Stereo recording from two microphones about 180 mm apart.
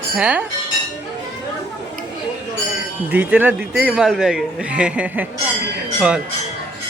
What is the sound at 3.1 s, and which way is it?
A man's voice, 10° right (ahead or behind).